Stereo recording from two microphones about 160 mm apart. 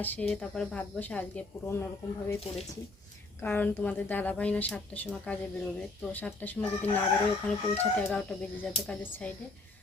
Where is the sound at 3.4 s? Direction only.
10° left (ahead or behind).